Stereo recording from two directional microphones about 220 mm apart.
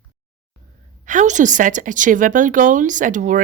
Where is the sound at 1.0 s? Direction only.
35° right (ahead or behind).